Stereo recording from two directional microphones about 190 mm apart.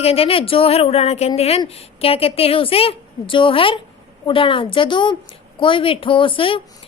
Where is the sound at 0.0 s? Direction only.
30° left (ahead or behind).